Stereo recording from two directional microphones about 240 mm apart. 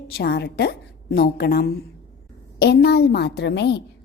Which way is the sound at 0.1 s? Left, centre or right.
Left.